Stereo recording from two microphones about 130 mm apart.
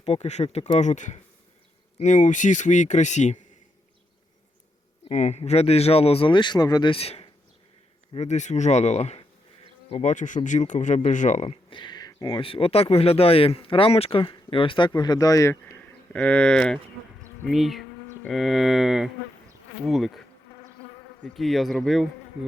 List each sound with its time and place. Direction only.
0.0 s speech: 55° left (ahead or behind)
0.8 s speech: 65° left (ahead or behind)
5.0 s speech: 60° left (ahead or behind); by 6.9 s 30° left (ahead or behind)
6.9 s speech: 50° left (ahead or behind)
8.2 s speech: 65° left (ahead or behind)
11.4 s speech: 35° left (ahead or behind)
15.8 s speech: 10° left (ahead or behind)
17.4 s a sound: centre (ahead or behind)
21.3 s a sound: centre (ahead or behind)